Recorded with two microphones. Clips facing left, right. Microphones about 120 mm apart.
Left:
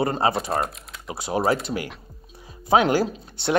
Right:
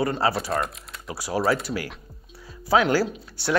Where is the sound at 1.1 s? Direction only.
25° left (ahead or behind).